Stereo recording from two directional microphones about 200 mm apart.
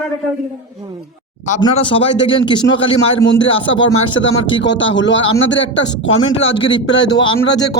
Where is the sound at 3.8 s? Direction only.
75° left (ahead or behind).